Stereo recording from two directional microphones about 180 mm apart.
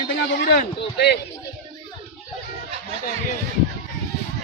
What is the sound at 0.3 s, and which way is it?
Speech, 65° left (ahead or behind).